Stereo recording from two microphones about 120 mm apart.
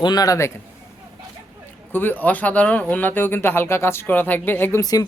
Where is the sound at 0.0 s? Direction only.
35° left (ahead or behind).